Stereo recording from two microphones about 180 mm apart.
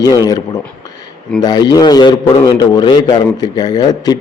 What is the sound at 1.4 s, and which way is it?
A man's voice, 20° left (ahead or behind).